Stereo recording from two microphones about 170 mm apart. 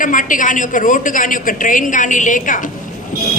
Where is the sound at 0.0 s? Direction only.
50° left (ahead or behind).